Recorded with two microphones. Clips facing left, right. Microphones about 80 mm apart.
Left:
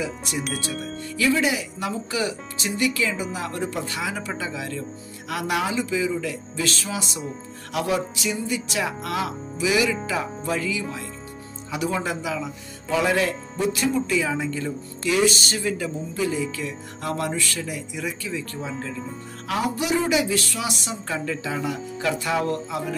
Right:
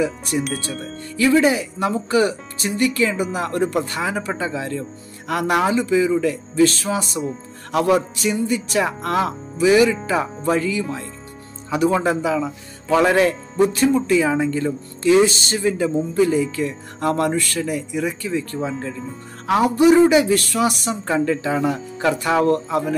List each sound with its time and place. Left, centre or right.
0.0 s a woman's voice: right
0.4 s speech: centre
1.1 s a woman's voice: right
5.3 s a woman's voice: right
12.9 s a woman's voice: right
15.0 s speech: right
16.2 s a woman's voice: right